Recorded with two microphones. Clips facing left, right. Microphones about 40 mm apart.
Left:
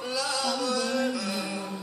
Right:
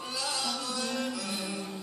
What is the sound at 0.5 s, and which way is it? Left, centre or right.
Music, left.